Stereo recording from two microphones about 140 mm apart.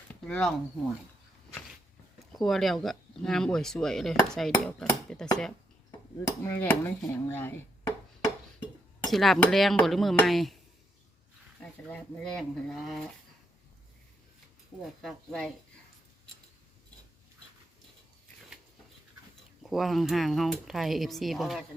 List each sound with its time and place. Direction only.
0.1 s a sound: 5° left (ahead or behind)
2.1 s speech: centre (ahead or behind)
4.6 s cutlery: 5° left (ahead or behind)
6.2 s chopping: 15° left (ahead or behind)
9.0 s speech: centre (ahead or behind)
11.6 s speech: 10° left (ahead or behind)
15.0 s speech: 5° left (ahead or behind)
19.6 s speech: centre (ahead or behind)